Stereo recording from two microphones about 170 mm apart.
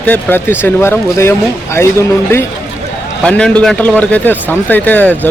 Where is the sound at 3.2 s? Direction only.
5° left (ahead or behind).